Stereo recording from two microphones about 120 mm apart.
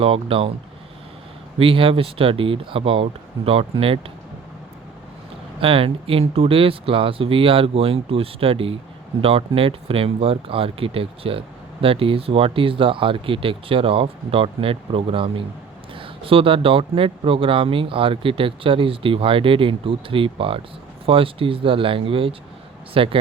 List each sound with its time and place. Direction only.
0.0 s speech: 50° right (ahead or behind)
1.5 s speech: 50° right (ahead or behind)
5.5 s speech: 50° right (ahead or behind)